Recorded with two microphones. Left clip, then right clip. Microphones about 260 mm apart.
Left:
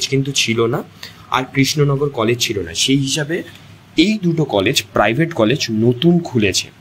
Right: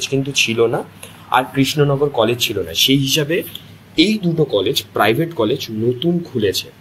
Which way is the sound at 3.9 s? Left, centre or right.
Left.